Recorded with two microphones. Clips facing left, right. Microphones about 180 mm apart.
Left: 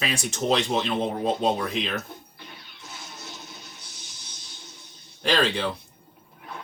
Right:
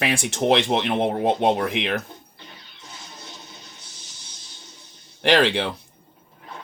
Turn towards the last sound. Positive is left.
turn(degrees=-70)  # may be behind; listen again after turning